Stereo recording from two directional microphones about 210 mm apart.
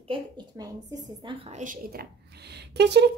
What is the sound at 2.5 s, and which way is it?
Speech, 50° right (ahead or behind).